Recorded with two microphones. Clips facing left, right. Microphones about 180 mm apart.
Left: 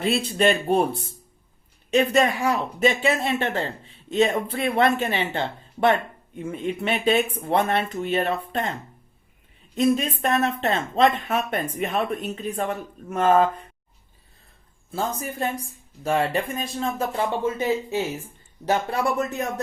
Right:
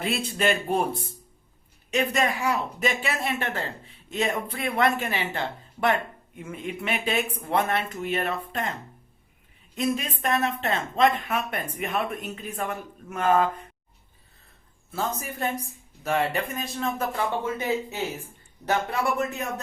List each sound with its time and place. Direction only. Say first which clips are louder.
0.0 s speech: left 5 dB; 30° left (ahead or behind)
1.9 s speech: left 5 dB; 30° left (ahead or behind)
9.7 s speech: left 6 dB; 35° left (ahead or behind)
14.9 s speech: left 3 dB; 25° left (ahead or behind)
18.7 s speech: left 2 dB; 30° left (ahead or behind)